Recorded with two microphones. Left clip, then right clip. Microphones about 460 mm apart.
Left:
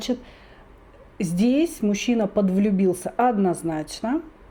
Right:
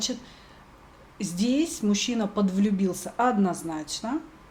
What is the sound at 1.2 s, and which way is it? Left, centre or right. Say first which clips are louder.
Speech: left 5 dB; left.